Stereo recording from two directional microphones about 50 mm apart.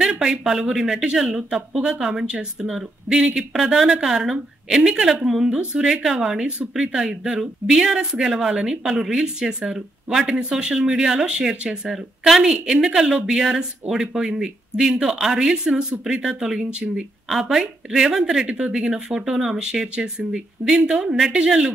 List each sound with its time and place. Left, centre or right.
0.0 s speech: centre
5.5 s a woman's voice: right
5.8 s speech: centre
17.3 s speech: centre